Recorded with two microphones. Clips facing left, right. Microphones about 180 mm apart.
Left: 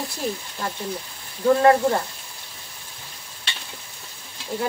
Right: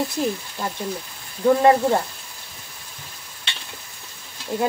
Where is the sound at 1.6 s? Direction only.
20° right (ahead or behind).